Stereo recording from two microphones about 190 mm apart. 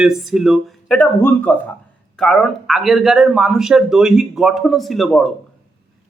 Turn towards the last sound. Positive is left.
turn(degrees=0)  # may be behind; listen again after turning